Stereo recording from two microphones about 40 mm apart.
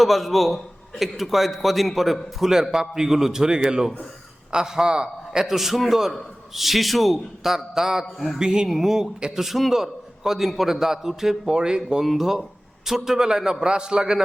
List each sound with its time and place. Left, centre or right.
0.0 s a man's voice: centre
2.4 s a man's voice: centre
8.0 s a man's voice: centre
8.4 s a man's voice: centre
8.7 s a man's voice: centre
12.0 s a man's voice: centre